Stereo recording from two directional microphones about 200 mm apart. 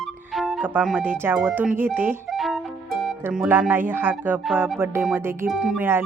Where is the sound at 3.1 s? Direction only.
5° right (ahead or behind).